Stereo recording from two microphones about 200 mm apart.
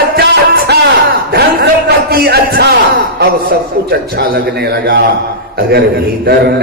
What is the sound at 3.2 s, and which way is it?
Mantra, 50° right (ahead or behind).